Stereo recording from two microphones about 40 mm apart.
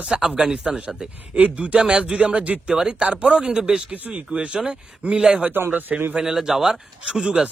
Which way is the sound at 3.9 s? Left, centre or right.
Right.